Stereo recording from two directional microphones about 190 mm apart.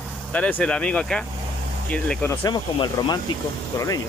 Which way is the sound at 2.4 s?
20° left (ahead or behind).